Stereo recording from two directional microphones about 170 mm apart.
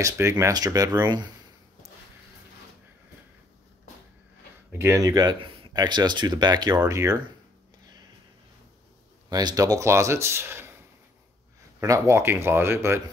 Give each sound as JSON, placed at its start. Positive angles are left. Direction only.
{"t": 0.0, "sound": "speech", "side_deg": -15}
{"t": 4.7, "sound": "speech", "side_deg": -15}
{"t": 9.3, "sound": "speech", "side_deg": -25}
{"t": 11.8, "sound": "speech", "side_deg": -15}